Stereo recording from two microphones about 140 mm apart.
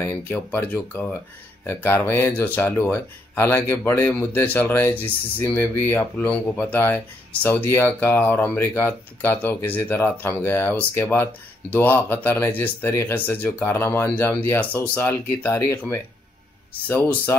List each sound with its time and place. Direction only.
0.0 s speech: 15° left (ahead or behind)
16.8 s speech: 15° left (ahead or behind)